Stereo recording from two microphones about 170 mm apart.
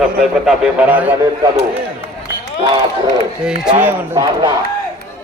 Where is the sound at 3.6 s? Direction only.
5° right (ahead or behind).